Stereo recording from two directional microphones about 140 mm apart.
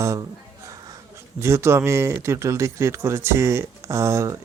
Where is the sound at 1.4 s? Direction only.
20° right (ahead or behind).